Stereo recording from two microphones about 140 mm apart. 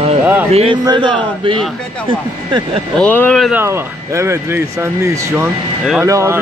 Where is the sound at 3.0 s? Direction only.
10° left (ahead or behind).